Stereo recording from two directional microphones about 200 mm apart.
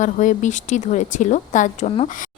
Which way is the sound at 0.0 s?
40° left (ahead or behind).